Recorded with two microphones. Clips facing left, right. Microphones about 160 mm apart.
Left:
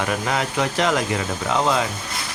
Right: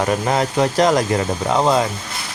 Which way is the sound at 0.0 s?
35° right (ahead or behind).